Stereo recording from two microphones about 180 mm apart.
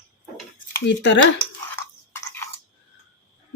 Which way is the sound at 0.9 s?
90° left.